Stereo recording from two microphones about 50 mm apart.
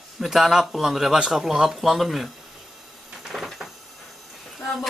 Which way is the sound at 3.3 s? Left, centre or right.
Centre.